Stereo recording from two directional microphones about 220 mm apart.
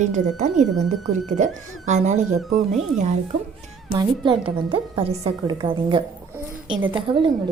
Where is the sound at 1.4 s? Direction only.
35° right (ahead or behind).